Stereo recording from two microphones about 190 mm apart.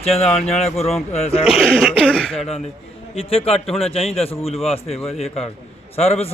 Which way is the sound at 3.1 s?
30° left (ahead or behind).